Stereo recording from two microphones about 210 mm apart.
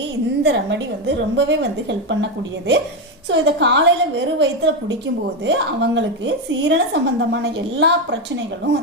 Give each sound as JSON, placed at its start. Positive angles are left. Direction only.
{"t": 0.4, "sound": "a woman's voice", "side_deg": -60}
{"t": 3.2, "sound": "a woman's voice", "side_deg": -60}